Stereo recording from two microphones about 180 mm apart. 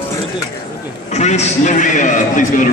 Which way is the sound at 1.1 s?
40° left (ahead or behind).